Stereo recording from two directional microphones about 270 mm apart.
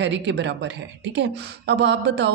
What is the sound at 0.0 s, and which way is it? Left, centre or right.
Speech, right.